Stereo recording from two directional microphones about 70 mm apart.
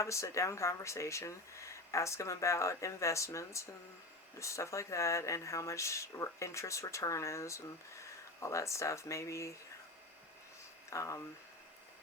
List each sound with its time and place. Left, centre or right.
0.0 s speech: left
10.8 s speech: left